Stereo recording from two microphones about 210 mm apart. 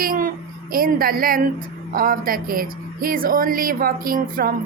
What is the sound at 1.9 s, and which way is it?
Speech, 40° right (ahead or behind).